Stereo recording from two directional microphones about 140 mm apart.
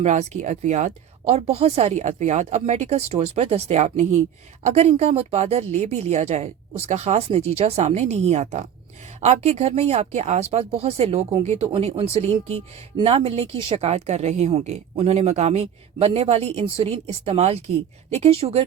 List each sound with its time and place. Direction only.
0.0 s speech: 55° right (ahead or behind)